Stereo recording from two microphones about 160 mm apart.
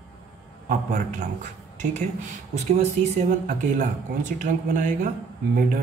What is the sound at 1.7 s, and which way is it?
Speech, 45° right (ahead or behind).